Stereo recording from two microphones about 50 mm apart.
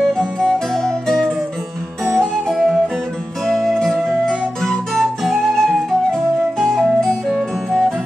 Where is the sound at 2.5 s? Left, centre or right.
Centre.